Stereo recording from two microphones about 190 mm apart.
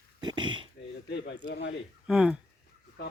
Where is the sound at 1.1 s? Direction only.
70° left (ahead or behind).